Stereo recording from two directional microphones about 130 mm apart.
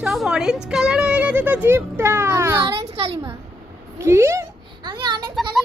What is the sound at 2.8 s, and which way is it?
Speech, 50° right (ahead or behind).